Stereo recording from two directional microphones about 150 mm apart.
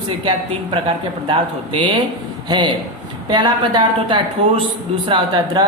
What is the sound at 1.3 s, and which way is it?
Speech, 35° right (ahead or behind).